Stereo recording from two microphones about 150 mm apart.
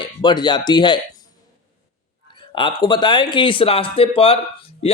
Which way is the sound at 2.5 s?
30° left (ahead or behind).